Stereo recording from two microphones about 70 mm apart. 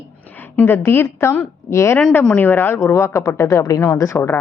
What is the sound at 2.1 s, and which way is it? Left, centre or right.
Speech, left.